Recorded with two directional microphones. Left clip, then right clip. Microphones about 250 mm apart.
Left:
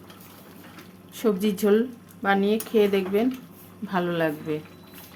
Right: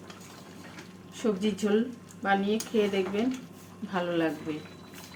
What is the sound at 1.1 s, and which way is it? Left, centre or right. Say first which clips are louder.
Speech: left 5 dB; left.